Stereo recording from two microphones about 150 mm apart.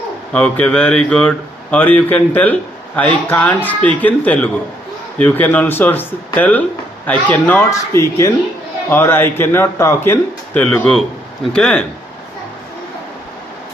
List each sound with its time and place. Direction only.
0.3 s speech: 10° left (ahead or behind)